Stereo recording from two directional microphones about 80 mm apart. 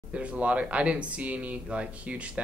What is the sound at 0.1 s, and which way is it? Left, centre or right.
Speech, centre.